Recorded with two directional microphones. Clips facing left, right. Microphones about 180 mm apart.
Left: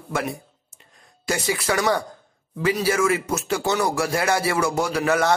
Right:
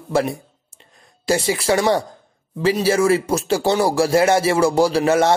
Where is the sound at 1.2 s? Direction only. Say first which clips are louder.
Right 5 dB; 30° right (ahead or behind).